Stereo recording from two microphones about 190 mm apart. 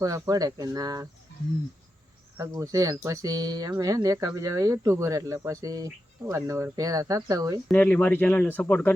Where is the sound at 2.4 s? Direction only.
15° right (ahead or behind).